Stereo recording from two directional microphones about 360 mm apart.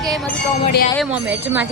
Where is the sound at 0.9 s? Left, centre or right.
Centre.